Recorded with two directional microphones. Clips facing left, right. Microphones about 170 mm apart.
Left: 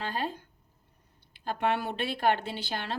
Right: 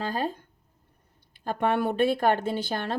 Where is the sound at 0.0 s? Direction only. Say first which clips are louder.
Right 4 dB; 40° right (ahead or behind).